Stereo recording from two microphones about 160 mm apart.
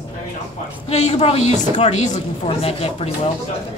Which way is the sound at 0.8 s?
45° left (ahead or behind).